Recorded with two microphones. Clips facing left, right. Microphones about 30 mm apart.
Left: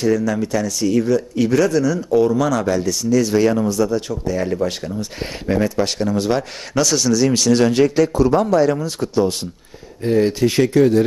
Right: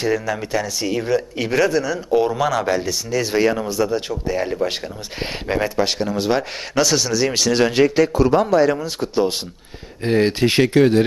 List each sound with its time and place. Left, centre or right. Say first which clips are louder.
0.0 s speech: left 3 dB; right
10.0 s speech: left 1 dB; right